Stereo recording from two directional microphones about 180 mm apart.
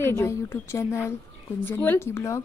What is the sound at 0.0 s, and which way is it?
A woman's voice, 15° left (ahead or behind).